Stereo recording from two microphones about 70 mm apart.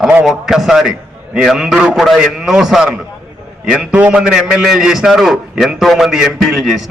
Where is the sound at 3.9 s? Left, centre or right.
Centre.